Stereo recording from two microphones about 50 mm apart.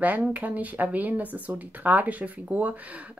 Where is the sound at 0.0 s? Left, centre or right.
Right.